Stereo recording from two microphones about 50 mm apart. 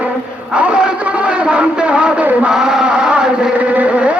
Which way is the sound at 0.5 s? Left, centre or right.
Right.